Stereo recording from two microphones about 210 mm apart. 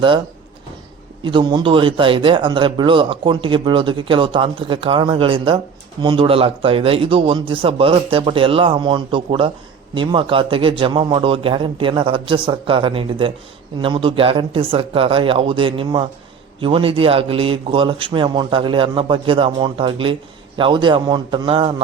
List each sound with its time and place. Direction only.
1.2 s a man's voice: 20° right (ahead or behind)